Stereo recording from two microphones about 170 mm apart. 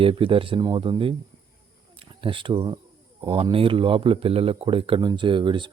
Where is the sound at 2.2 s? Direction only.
30° right (ahead or behind).